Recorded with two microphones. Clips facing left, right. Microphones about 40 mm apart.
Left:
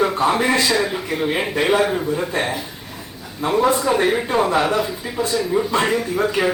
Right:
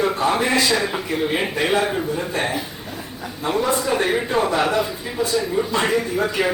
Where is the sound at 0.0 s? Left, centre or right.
Centre.